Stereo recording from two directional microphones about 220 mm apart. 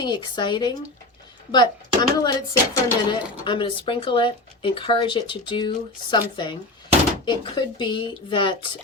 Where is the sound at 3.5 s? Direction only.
20° left (ahead or behind).